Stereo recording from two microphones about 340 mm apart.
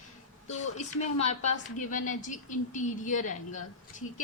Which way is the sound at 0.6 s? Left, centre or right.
Centre.